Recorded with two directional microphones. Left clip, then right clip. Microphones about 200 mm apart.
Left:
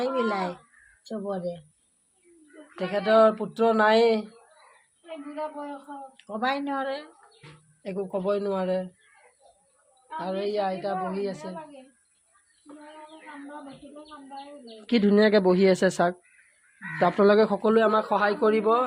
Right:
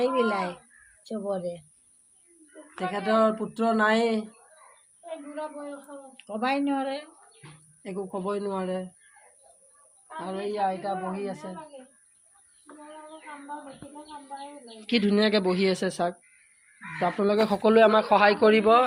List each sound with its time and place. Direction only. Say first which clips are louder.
0.0 s a woman's voice: right 2 dB; 15° left (ahead or behind)
2.7 s speech: left 4 dB; 25° left (ahead or behind)
6.1 s a woman's voice: even; 15° left (ahead or behind)
7.8 s speech: left 3 dB; 30° left (ahead or behind)
10.2 s a woman's voice: left 2 dB; 25° left (ahead or behind); by 11.3 s 10° left (ahead or behind)
12.7 s bird: left 1 dB; 30° right (ahead or behind)
14.8 s speech: left 3 dB; 30° left (ahead or behind)
17.6 s a man's voice: right 3 dB; 5° left (ahead or behind)